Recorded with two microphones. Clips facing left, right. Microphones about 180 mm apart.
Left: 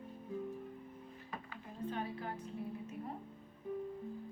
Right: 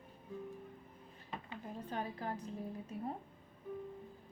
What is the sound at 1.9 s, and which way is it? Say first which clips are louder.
Speech: even; 40° right (ahead or behind).